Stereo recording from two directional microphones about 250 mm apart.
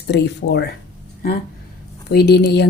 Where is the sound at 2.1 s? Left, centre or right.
Left.